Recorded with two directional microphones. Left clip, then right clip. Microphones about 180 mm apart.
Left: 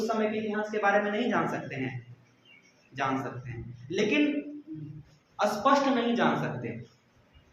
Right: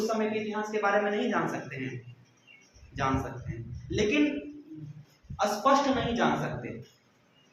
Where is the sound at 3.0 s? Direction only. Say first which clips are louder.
Even; 30° left (ahead or behind).